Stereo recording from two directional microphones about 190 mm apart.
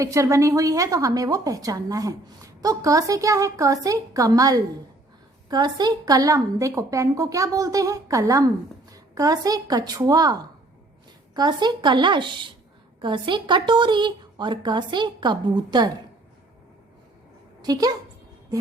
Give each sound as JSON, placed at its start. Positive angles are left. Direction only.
{"t": 0.0, "sound": "a woman's voice", "side_deg": -15}
{"t": 11.3, "sound": "a woman's voice", "side_deg": -20}
{"t": 17.6, "sound": "a woman's voice", "side_deg": -20}